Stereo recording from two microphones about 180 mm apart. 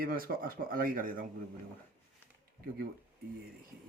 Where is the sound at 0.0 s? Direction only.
55° right (ahead or behind).